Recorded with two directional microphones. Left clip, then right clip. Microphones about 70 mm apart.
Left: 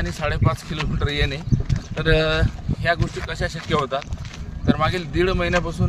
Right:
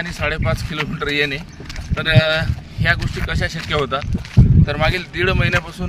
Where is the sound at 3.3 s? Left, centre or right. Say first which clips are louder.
Right 3 dB; left.